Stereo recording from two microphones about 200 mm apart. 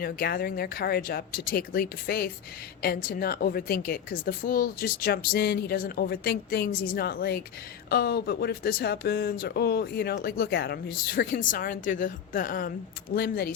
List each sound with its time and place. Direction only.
0.0 s speech: 50° left (ahead or behind)